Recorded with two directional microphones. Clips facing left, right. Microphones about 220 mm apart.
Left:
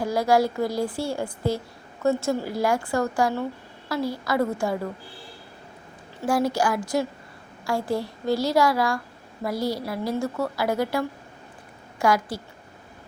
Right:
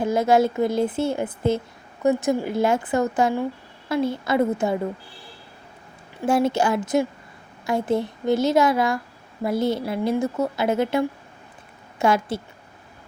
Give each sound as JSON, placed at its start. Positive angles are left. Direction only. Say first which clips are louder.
{"t": 0.0, "sound": "a woman's voice", "louder": "right 3 dB", "side_deg": -20}
{"t": 6.2, "sound": "a woman's voice", "louder": "right 3 dB", "side_deg": -25}